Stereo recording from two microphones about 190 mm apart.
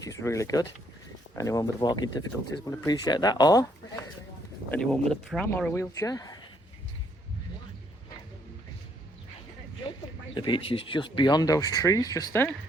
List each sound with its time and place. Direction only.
0.0 s speech: 15° left (ahead or behind)
4.7 s speech: centre (ahead or behind); by 6.4 s 20° left (ahead or behind)
10.3 s speech: 25° left (ahead or behind)